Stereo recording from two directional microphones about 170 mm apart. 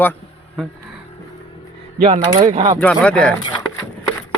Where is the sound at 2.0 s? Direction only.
30° right (ahead or behind).